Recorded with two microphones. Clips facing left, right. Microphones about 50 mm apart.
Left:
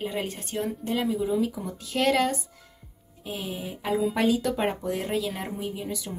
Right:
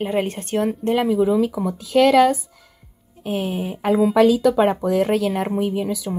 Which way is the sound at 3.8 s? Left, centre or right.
Right.